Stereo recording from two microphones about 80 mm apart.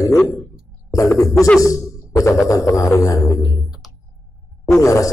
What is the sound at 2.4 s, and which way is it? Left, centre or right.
Didgeridoo, left.